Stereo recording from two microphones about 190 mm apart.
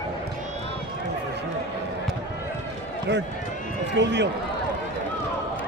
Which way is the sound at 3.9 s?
65° right (ahead or behind).